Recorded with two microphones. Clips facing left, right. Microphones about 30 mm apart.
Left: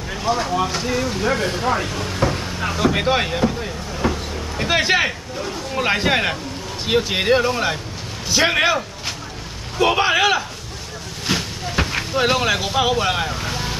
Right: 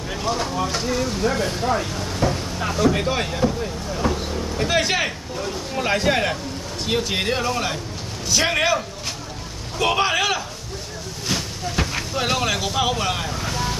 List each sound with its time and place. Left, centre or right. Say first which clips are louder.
0.1 s vehicle: left 3 dB; centre
0.8 s speech: left 2 dB; centre
3.9 s a sound: left 1 dB; centre
5.8 s speech: left 2 dB; left
11.2 s vehicle: left 3 dB; left